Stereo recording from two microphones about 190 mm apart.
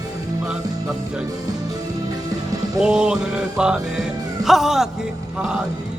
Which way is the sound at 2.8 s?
5° right (ahead or behind).